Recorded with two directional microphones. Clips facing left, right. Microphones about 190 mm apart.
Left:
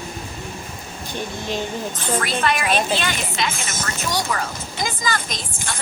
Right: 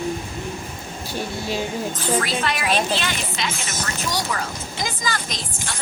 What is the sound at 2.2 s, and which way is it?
Speech, 55° left (ahead or behind).